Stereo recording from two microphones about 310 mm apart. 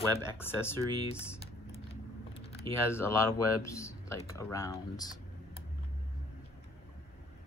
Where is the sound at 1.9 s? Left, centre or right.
Centre.